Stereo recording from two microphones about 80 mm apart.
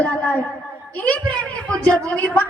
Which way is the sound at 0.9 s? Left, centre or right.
Centre.